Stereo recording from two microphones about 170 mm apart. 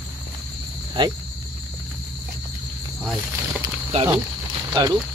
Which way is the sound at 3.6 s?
25° right (ahead or behind).